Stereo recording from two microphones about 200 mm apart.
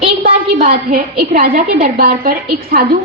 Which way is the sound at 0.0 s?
30° right (ahead or behind).